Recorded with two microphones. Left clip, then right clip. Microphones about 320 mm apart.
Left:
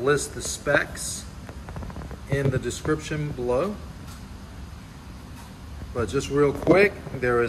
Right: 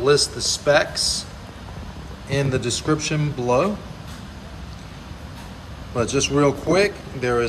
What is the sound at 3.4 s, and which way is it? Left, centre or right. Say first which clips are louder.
Speech: right 5 dB; right.